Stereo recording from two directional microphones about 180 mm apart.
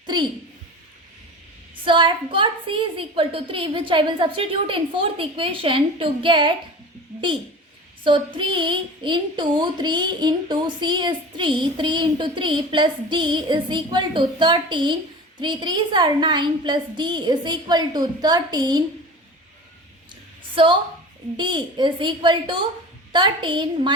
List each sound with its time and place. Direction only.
0.0 s a sound: 25° right (ahead or behind)
1.8 s a woman's voice: 25° right (ahead or behind)
8.0 s a woman's voice: 25° right (ahead or behind)
20.6 s a woman's voice: 30° right (ahead or behind)